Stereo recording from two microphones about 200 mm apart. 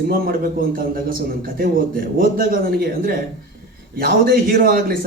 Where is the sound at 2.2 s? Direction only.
45° right (ahead or behind).